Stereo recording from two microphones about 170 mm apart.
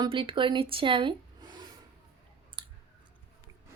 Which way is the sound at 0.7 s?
30° right (ahead or behind).